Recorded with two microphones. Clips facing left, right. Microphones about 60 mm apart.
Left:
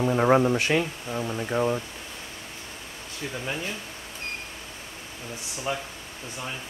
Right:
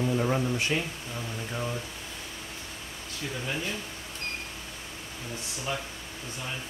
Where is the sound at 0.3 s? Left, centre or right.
Left.